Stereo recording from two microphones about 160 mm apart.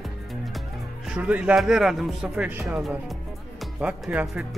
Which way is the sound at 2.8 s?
Centre (ahead or behind).